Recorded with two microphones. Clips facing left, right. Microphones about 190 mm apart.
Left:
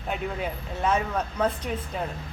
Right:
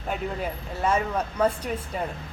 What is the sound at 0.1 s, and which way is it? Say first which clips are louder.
Speech: right 1 dB; centre (ahead or behind).